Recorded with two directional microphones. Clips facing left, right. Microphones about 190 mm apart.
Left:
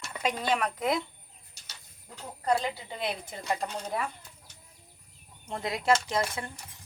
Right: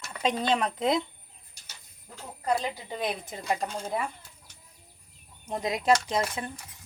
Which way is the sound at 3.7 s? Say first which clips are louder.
Right 2 dB; centre (ahead or behind).